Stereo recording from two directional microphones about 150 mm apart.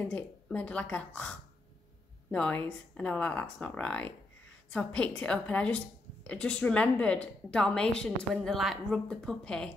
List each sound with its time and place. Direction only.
0.0 s a woman's voice: 10° left (ahead or behind)